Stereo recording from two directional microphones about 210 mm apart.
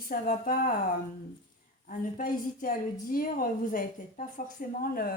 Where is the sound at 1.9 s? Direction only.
40° left (ahead or behind).